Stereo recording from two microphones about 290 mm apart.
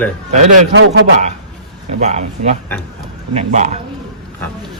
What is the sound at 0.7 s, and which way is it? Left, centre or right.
Speech, right.